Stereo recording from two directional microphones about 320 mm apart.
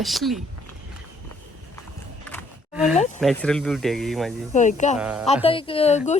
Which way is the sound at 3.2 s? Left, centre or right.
Centre.